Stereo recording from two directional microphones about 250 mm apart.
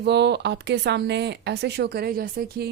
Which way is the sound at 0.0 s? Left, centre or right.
Right.